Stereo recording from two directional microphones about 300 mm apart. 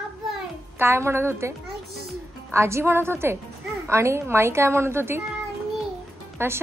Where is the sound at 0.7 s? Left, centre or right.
Centre.